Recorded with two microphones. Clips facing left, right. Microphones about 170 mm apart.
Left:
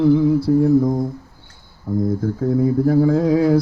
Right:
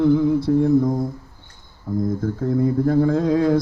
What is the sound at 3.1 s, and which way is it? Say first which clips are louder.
Speech: left 2 dB; 10° left (ahead or behind).